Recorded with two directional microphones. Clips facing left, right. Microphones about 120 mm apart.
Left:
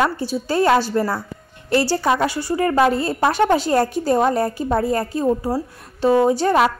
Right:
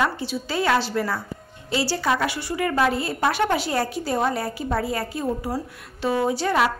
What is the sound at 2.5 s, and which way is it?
A woman's voice, 35° left (ahead or behind).